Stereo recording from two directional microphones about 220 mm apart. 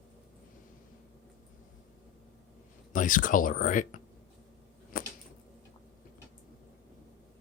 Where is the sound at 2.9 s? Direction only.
35° left (ahead or behind).